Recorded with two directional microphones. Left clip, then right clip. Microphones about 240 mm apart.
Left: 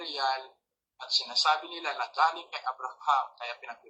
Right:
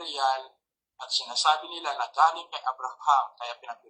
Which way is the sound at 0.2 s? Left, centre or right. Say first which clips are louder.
Right 4 dB; right.